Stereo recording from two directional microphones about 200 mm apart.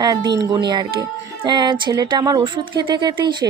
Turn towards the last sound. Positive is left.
turn(degrees=-20)  # may be behind; listen again after turning